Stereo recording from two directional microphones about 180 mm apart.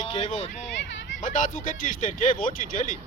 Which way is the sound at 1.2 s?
45° left (ahead or behind).